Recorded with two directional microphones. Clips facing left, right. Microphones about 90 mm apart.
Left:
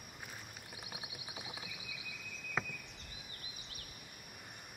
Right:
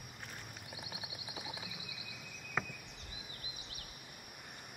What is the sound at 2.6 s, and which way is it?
Insect, centre (ahead or behind).